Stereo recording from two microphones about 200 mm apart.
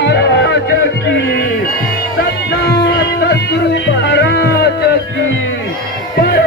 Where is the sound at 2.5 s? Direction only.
55° left (ahead or behind).